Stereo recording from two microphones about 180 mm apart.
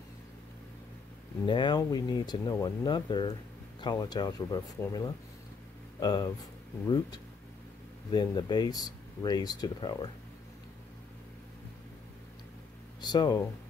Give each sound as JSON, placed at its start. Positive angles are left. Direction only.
{"t": 1.4, "sound": "speech", "side_deg": 25}
{"t": 8.1, "sound": "speech", "side_deg": 25}
{"t": 13.0, "sound": "speech", "side_deg": 25}